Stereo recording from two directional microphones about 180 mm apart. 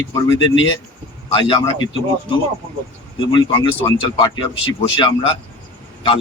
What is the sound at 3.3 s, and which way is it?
Speech, 25° left (ahead or behind).